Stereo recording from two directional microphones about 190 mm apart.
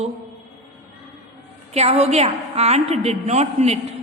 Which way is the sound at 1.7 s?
35° right (ahead or behind).